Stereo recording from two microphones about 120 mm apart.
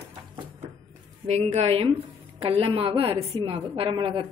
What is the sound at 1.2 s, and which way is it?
A woman's voice, 60° right (ahead or behind).